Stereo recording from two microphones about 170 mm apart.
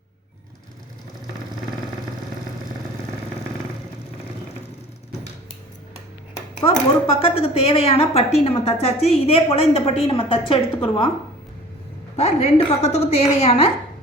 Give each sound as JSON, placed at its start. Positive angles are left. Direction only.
{"t": 6.7, "sound": "speech", "side_deg": 30}
{"t": 12.1, "sound": "speech", "side_deg": 40}